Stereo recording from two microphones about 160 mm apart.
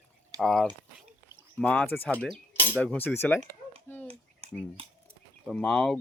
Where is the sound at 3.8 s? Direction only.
10° left (ahead or behind).